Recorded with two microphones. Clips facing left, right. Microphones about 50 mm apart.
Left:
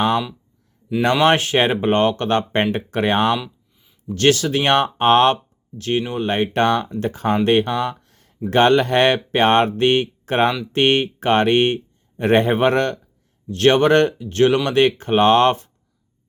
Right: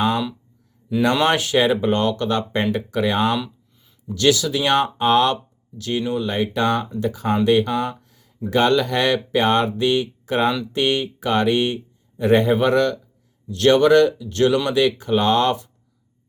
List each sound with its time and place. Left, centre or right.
1.2 s speech: left
3.4 s a sound: centre
4.1 s speech: left
14.7 s speech: left